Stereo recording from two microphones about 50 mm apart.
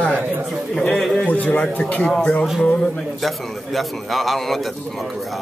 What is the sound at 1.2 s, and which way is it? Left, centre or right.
Speech, left.